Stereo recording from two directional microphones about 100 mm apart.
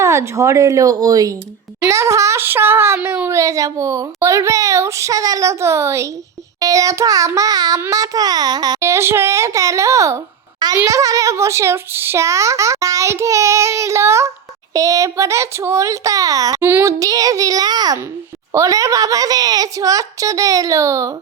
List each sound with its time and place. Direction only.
0.0 s speech: 30° right (ahead or behind)
8.8 s speech: 25° right (ahead or behind)
16.6 s speech: 20° right (ahead or behind)
16.8 s speech: 35° right (ahead or behind)